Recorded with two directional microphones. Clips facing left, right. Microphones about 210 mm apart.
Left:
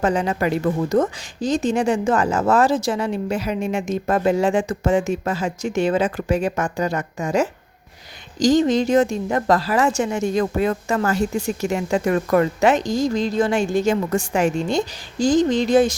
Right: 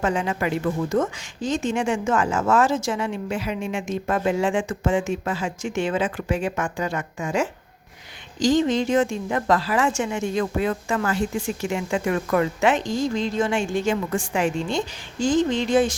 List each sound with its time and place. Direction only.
0.0 s a woman's voice: 35° left (ahead or behind)